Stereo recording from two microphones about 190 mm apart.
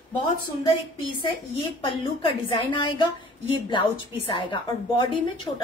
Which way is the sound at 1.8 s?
25° left (ahead or behind).